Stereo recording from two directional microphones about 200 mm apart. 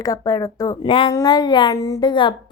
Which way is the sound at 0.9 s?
25° left (ahead or behind).